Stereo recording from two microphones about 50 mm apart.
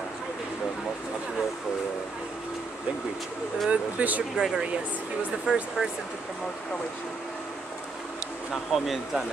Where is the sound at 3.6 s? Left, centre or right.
Right.